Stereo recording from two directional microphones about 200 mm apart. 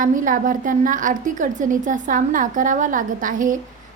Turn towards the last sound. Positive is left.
turn(degrees=-40)  # may be behind; listen again after turning